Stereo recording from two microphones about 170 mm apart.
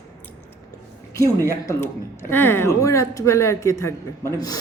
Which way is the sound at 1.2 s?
15° right (ahead or behind).